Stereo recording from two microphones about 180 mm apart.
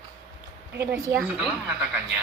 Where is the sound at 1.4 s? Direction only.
Centre (ahead or behind).